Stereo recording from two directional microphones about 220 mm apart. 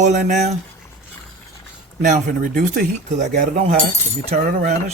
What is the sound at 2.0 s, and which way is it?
Speech, 35° right (ahead or behind).